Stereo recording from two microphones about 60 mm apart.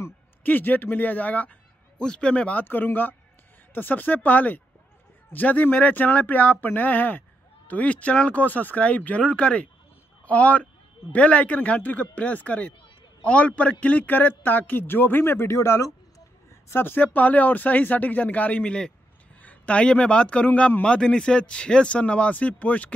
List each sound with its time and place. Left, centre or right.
0.4 s speech: left
2.0 s a man's voice: centre
2.6 s a man's voice: left
16.6 s speech: left